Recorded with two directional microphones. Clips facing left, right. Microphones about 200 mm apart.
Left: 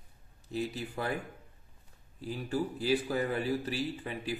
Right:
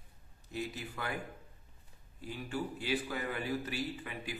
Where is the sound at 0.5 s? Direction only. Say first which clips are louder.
Left 5 dB; 30° left (ahead or behind).